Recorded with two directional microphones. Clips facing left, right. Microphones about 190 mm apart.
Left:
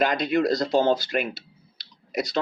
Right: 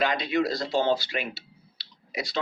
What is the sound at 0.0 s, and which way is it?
Speech, 45° left (ahead or behind).